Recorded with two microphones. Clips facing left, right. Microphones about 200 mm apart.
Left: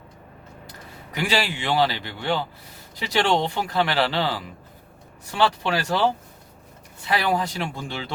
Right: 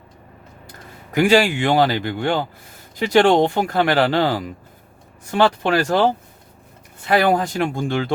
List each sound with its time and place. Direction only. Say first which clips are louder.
1.1 s speech: right 10 dB; 50° right (ahead or behind)